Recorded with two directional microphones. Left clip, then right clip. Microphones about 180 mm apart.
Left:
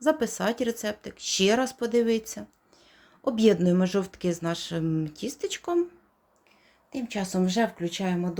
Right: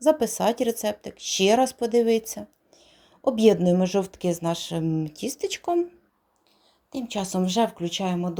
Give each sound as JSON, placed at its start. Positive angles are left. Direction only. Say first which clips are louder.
{"t": 0.0, "sound": "speech", "louder": "right 4 dB", "side_deg": -15}
{"t": 6.9, "sound": "speech", "louder": "right 2 dB", "side_deg": -25}